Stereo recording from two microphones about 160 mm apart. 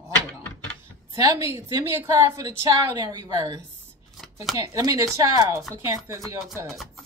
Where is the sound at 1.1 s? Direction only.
20° right (ahead or behind).